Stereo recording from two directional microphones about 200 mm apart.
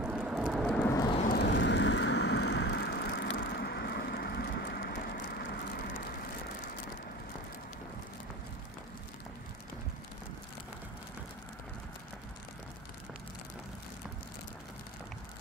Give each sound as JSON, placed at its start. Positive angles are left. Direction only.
{"t": 0.0, "sound": "vehicle", "side_deg": -5}
{"t": 1.3, "sound": "vehicle", "side_deg": 60}